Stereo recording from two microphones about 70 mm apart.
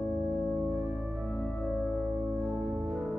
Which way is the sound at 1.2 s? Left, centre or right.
Centre.